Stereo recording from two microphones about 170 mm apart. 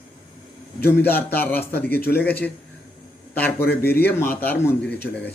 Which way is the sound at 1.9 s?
70° left (ahead or behind).